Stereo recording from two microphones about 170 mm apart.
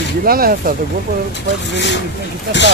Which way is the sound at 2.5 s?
80° right.